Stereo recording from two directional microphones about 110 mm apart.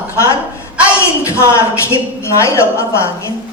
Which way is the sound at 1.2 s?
25° left (ahead or behind).